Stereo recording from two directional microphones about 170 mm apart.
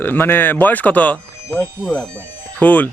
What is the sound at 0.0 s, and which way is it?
Speech, 10° left (ahead or behind).